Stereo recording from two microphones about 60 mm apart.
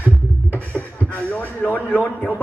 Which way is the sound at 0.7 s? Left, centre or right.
Left.